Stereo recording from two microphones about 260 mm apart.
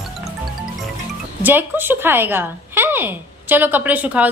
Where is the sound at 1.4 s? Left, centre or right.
Centre.